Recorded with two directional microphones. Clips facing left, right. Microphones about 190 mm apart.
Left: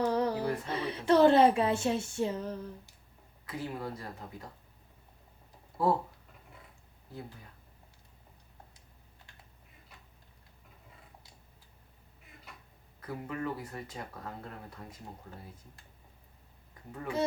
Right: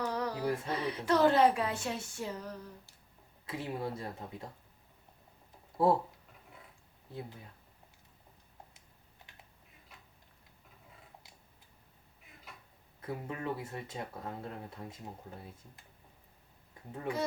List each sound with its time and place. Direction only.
0.0 s speech: 25° left (ahead or behind)
3.4 s speech: 25° right (ahead or behind)
5.8 s speech: 25° right (ahead or behind)
9.3 s typing: 20° right (ahead or behind)
13.0 s speech: 25° right (ahead or behind)